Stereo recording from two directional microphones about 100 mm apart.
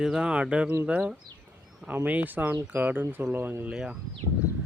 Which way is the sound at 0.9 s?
20° right (ahead or behind).